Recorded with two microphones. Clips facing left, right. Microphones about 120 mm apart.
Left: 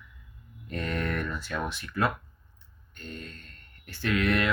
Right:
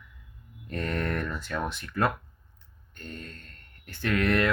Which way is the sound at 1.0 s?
45° right (ahead or behind).